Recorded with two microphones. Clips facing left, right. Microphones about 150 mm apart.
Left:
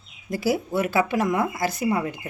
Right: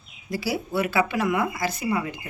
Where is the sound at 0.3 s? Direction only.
50° left (ahead or behind).